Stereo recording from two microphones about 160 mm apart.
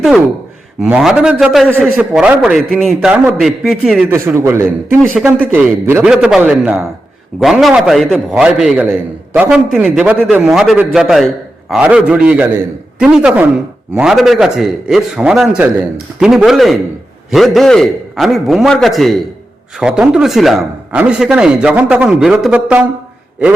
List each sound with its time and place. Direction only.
0.8 s a man's voice: 5° right (ahead or behind)
4.1 s a man's voice: 15° right (ahead or behind)